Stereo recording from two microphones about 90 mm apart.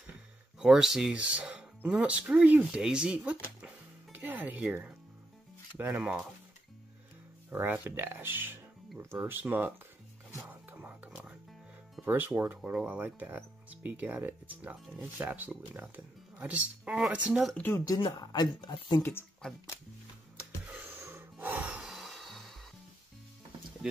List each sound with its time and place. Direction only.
0.6 s speech: 5° right (ahead or behind)
5.8 s speech: 20° right (ahead or behind)
7.5 s speech: 20° right (ahead or behind)
10.3 s music: 20° right (ahead or behind)
12.0 s speech: 20° right (ahead or behind)
17.9 s speech: 50° left (ahead or behind)
19.4 s speech: 5° left (ahead or behind)
20.3 s a sound: 15° right (ahead or behind)
21.9 s music: centre (ahead or behind)